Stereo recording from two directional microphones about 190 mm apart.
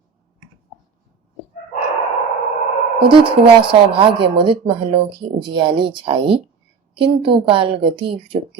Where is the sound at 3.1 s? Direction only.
25° right (ahead or behind).